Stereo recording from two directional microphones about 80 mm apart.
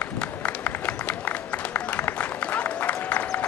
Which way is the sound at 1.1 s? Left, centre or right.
Centre.